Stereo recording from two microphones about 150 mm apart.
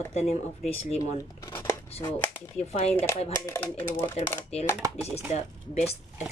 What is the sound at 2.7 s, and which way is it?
Speech, 45° left (ahead or behind).